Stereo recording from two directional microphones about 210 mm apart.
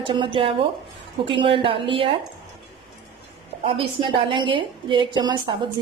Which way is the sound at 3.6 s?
25° right (ahead or behind).